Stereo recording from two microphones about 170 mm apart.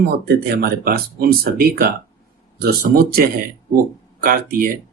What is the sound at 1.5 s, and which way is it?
Speech, 60° right (ahead or behind).